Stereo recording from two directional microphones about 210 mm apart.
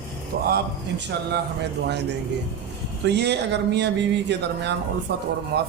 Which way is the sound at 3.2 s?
55° right (ahead or behind).